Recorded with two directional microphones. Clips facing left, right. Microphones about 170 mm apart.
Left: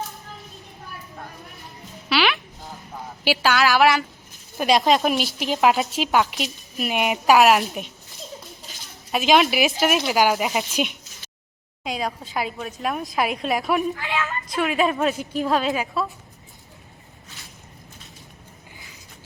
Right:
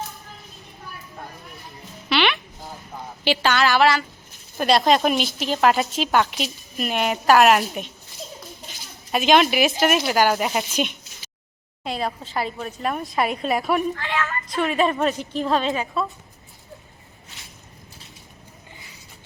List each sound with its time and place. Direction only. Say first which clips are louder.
2.0 s a sound: even; 5° left (ahead or behind)
3.2 s a woman's voice: even; 5° left (ahead or behind)
6.9 s a woman's voice: even; 15° left (ahead or behind)
7.3 s a woman's voice: right 1 dB; centre (ahead or behind)
9.1 s a woman's voice: right 1 dB; centre (ahead or behind)
13.9 s a woman's voice: right 1 dB; 15° left (ahead or behind)
14.6 s a woman's voice: even; centre (ahead or behind)